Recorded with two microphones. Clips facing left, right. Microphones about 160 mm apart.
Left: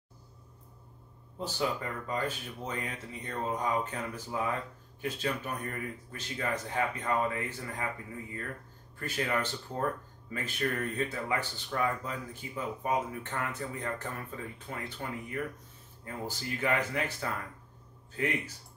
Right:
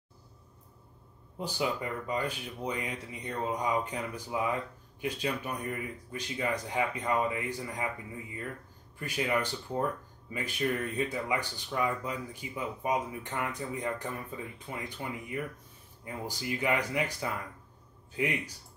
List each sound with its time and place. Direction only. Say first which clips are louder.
1.4 s speech: right 1 dB; 15° right (ahead or behind)